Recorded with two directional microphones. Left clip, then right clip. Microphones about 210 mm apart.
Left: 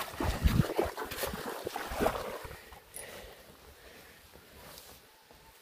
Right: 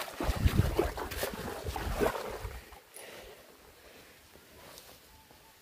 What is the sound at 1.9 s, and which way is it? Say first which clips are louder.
Boat: even; centre (ahead or behind).